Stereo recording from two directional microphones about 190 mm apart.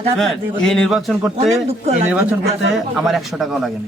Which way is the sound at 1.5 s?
35° right (ahead or behind).